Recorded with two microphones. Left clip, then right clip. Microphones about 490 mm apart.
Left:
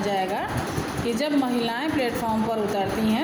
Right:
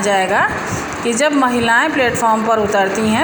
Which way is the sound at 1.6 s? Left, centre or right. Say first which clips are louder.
Right 12 dB; left.